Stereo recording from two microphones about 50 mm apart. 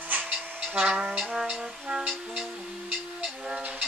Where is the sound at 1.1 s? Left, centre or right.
Centre.